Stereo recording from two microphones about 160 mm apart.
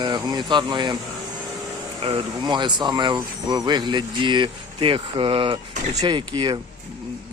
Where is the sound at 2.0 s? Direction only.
35° right (ahead or behind).